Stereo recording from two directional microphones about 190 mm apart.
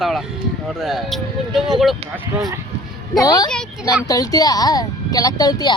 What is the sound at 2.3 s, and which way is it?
Speech, 15° right (ahead or behind).